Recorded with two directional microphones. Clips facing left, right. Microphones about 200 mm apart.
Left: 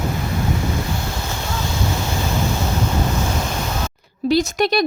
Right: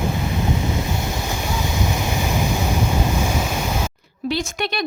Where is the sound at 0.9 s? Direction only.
15° right (ahead or behind).